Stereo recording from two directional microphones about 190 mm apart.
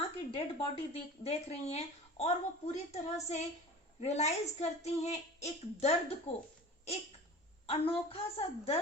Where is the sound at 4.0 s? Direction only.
35° left (ahead or behind).